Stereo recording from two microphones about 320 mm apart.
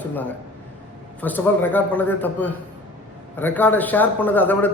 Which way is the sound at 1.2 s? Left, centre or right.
Centre.